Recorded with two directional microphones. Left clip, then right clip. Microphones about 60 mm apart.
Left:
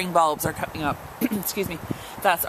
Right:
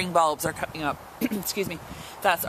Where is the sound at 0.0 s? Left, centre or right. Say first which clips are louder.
Left 2 dB; right.